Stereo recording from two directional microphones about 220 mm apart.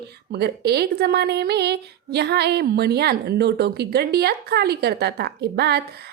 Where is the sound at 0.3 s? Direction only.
45° right (ahead or behind).